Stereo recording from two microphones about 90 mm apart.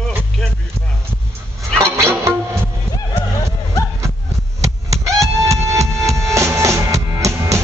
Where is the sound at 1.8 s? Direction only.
30° right (ahead or behind).